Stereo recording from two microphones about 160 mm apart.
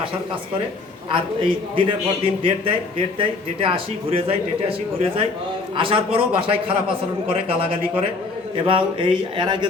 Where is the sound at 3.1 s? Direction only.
35° right (ahead or behind).